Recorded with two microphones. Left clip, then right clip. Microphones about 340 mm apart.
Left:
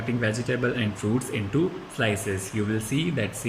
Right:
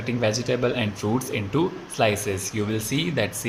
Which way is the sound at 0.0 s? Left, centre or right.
Centre.